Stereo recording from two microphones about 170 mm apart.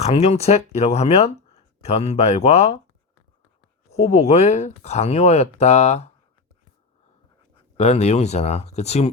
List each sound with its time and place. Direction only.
0.0 s speech: 40° left (ahead or behind)
3.9 s speech: 40° left (ahead or behind)
7.8 s speech: 40° left (ahead or behind)